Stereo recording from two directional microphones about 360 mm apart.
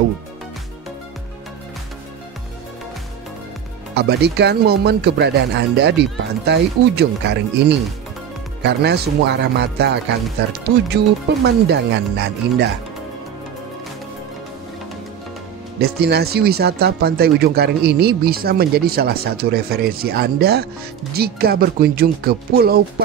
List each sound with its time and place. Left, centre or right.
3.9 s speech: right
15.8 s speech: right